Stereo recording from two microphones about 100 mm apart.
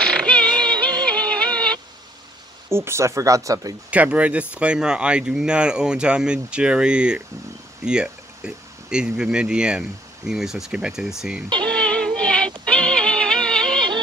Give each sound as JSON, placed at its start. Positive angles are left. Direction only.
{"t": 0.2, "sound": "music", "side_deg": 10}
{"t": 0.6, "sound": "music", "side_deg": -45}
{"t": 1.1, "sound": "music", "side_deg": 10}
{"t": 2.7, "sound": "speech", "side_deg": -25}
{"t": 3.9, "sound": "speech", "side_deg": -15}
{"t": 11.4, "sound": "speech", "side_deg": -45}
{"t": 11.7, "sound": "synthetic singing", "side_deg": 10}
{"t": 12.7, "sound": "music", "side_deg": 10}